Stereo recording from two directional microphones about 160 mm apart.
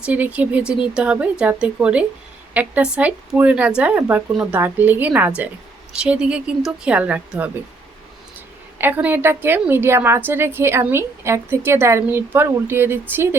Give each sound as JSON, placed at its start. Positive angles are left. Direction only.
{"t": 0.0, "sound": "a woman's voice", "side_deg": -10}
{"t": 8.8, "sound": "a woman's voice", "side_deg": -10}